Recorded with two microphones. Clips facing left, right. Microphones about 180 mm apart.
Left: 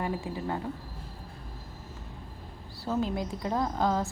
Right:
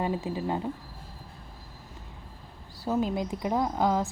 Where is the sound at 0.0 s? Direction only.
20° right (ahead or behind).